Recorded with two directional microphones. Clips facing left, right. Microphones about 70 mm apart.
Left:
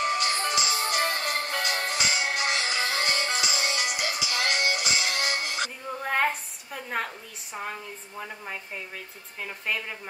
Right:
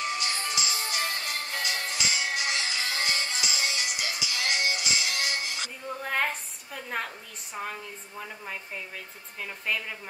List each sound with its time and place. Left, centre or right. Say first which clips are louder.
0.0 s music: left 5 dB; left
5.9 s a sound: left 4 dB; centre
7.5 s speech: left 1 dB; centre